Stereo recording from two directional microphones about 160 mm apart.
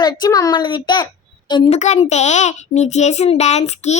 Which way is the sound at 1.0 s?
30° left (ahead or behind).